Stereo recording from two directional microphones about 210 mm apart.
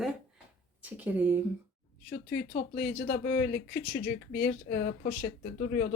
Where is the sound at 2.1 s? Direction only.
45° left (ahead or behind).